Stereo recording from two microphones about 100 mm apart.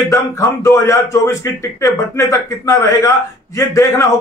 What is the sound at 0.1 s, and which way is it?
A man's voice, 30° left (ahead or behind).